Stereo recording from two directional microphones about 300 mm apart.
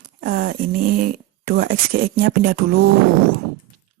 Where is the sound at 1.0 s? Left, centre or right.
Right.